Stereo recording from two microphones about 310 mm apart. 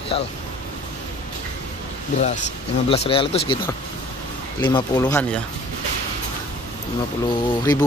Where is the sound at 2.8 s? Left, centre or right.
Centre.